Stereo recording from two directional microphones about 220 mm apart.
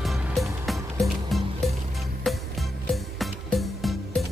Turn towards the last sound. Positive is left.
turn(degrees=0)  # may be behind; listen again after turning